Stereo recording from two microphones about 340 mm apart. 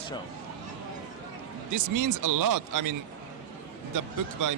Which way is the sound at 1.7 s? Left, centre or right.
Right.